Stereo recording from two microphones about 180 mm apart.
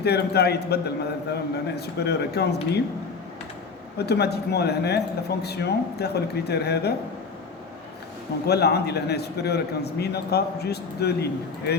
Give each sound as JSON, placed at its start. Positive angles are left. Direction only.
{"t": 0.0, "sound": "a man's voice", "side_deg": 65}
{"t": 3.9, "sound": "a man's voice", "side_deg": 65}
{"t": 8.4, "sound": "a man's voice", "side_deg": 65}